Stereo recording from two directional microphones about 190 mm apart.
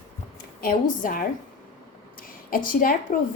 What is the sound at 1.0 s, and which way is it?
A woman's voice, 45° left (ahead or behind).